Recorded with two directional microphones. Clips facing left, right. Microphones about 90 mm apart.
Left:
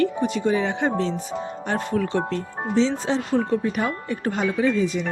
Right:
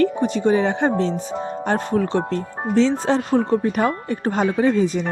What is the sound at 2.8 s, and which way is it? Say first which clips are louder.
Speech: right 4 dB; 50° right (ahead or behind).